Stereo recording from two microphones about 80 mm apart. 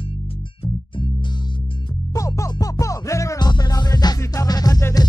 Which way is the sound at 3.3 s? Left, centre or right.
Left.